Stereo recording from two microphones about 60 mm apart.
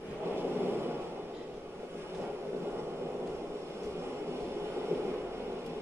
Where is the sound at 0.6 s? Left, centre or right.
Right.